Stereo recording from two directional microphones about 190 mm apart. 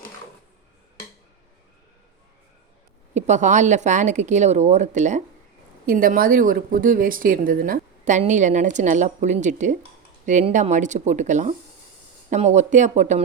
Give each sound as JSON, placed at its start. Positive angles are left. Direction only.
{"t": 3.2, "sound": "speech", "side_deg": -40}